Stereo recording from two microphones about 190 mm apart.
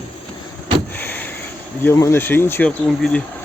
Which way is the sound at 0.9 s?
10° left (ahead or behind).